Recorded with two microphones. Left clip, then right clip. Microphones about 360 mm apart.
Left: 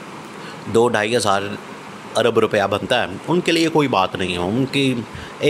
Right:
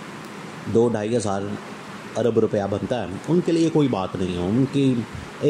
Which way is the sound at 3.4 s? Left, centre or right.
Left.